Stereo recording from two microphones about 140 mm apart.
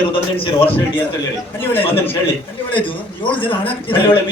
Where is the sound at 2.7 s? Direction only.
35° left (ahead or behind).